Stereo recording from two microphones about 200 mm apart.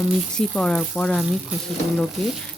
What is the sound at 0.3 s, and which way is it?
Speech, 5° left (ahead or behind).